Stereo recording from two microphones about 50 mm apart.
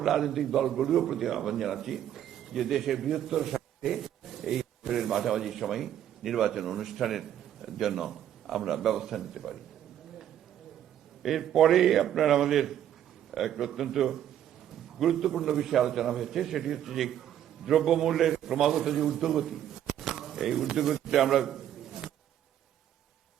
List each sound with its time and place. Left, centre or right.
0.0 s a man's voice: centre
11.2 s a man's voice: centre